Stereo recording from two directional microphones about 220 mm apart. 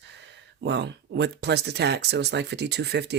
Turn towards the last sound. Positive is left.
turn(degrees=-50)  # may be behind; listen again after turning